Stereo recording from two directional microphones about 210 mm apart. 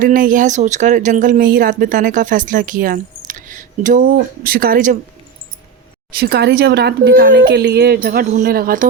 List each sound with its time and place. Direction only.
0.0 s speech: 40° right (ahead or behind)
6.1 s speech: 50° right (ahead or behind)